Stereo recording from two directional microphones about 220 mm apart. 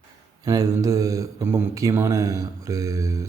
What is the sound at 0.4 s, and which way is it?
Speech, 15° right (ahead or behind).